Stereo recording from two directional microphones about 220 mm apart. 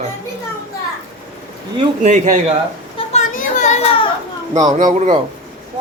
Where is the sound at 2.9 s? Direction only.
30° left (ahead or behind).